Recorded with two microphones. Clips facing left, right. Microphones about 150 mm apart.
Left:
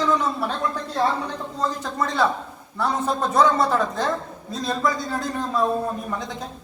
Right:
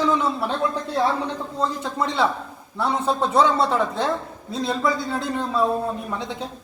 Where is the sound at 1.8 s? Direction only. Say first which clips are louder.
Left 1 dB; 10° right (ahead or behind).